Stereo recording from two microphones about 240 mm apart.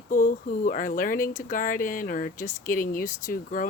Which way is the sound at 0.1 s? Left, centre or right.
Left.